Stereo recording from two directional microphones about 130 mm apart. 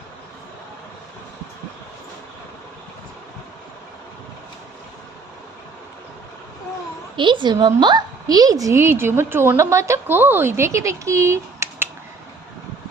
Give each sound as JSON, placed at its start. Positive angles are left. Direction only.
{"t": 7.2, "sound": "a woman's voice", "side_deg": -40}